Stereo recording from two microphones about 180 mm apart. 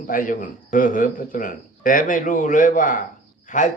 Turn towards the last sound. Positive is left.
turn(degrees=45)  # may be behind; listen again after turning